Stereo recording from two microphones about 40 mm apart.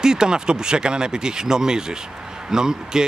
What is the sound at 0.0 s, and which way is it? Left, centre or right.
Speech, centre.